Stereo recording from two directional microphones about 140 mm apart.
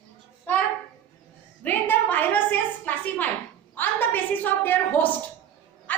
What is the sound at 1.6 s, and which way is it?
A woman's voice, 15° left (ahead or behind).